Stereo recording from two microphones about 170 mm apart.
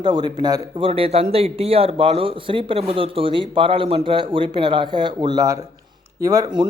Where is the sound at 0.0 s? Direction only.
25° right (ahead or behind).